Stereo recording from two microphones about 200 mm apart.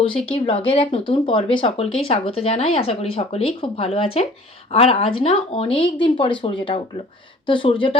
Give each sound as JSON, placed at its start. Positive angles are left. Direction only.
{"t": 0.3, "sound": "speech", "side_deg": 25}